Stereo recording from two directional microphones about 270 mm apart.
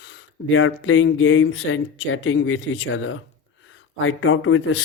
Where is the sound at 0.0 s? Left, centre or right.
Left.